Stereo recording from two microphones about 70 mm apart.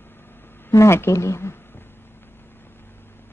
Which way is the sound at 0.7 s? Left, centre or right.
Left.